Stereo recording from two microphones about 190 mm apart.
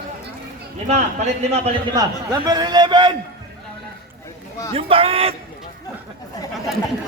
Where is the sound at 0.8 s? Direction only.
35° right (ahead or behind).